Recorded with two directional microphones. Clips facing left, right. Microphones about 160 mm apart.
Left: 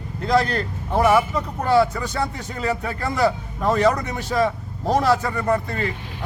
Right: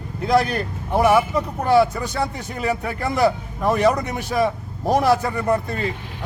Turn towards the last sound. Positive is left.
turn(degrees=-15)  # may be behind; listen again after turning